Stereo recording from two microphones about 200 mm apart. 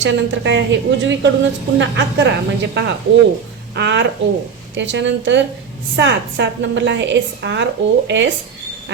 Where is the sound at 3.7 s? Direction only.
60° right (ahead or behind).